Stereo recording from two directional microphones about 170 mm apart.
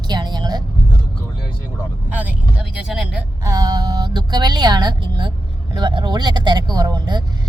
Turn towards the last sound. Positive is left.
turn(degrees=-25)  # may be behind; listen again after turning